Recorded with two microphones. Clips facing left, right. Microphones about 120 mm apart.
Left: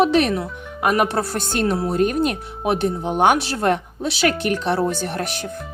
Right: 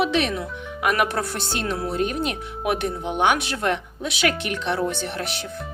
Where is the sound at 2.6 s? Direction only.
30° left (ahead or behind).